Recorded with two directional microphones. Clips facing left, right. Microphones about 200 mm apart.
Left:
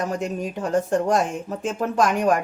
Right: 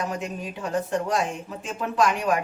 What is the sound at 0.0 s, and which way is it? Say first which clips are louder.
Speech: left 4 dB; 45° left (ahead or behind).